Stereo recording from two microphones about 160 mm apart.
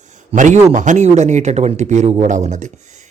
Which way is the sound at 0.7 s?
50° right (ahead or behind).